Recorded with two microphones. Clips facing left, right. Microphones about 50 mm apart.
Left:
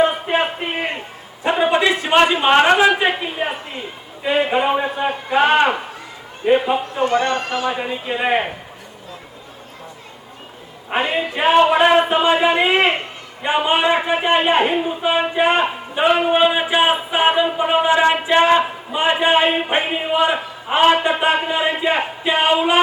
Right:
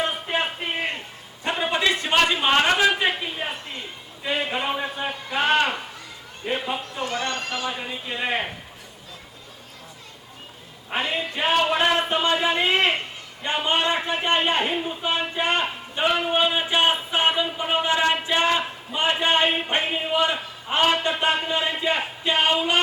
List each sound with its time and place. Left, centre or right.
0.0 s a sound: centre
2.1 s a man's voice: centre
5.0 s a man's voice: left; by 7.8 s centre
7.8 s a man's voice: centre
10.8 s a woman's voice: centre